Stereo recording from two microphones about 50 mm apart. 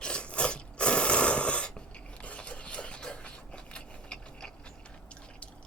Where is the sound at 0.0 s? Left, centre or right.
Left.